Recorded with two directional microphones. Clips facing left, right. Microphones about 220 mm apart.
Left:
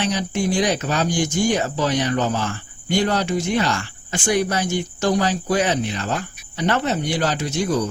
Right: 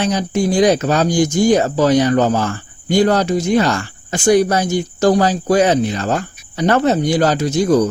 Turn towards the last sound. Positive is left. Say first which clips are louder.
# right 8 dB
turn(degrees=-40)  # may be behind; listen again after turning